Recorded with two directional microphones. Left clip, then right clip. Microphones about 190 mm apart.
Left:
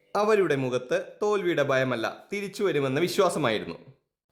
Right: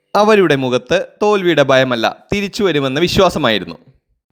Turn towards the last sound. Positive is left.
turn(degrees=-35)  # may be behind; listen again after turning